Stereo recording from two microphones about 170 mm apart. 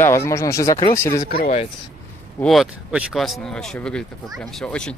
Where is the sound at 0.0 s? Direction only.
15° left (ahead or behind).